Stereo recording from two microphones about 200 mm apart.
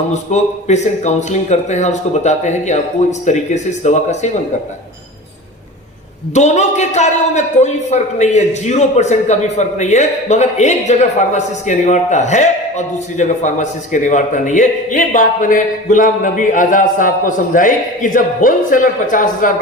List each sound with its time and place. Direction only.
0.1 s a man's voice: 35° left (ahead or behind)
6.3 s a man's voice: 35° left (ahead or behind)